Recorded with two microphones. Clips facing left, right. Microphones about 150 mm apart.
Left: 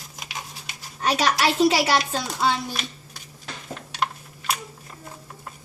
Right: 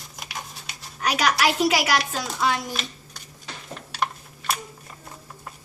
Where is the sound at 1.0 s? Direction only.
30° left (ahead or behind).